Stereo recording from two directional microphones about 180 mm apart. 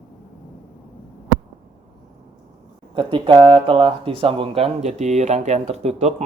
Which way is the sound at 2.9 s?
25° right (ahead or behind).